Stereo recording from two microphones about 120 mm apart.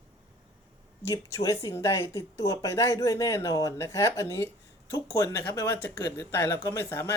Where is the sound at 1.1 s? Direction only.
25° left (ahead or behind).